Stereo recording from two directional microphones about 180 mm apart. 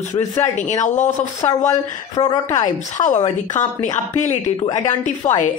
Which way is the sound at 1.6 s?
20° left (ahead or behind).